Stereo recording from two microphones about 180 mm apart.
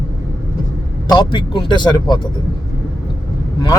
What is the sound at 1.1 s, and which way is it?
Speech, 25° left (ahead or behind).